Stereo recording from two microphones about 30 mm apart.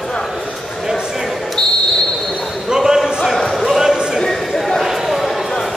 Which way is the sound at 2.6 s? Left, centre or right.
Centre.